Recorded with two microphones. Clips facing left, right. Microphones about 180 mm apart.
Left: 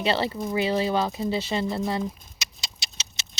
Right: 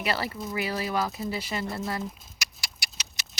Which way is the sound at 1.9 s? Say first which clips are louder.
Left 5 dB; 25° left (ahead or behind).